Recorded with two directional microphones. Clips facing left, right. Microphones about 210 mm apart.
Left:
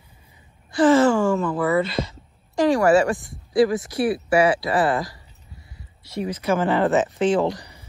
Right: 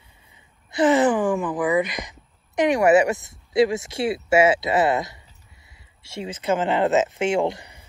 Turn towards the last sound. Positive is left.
turn(degrees=-20)  # may be behind; listen again after turning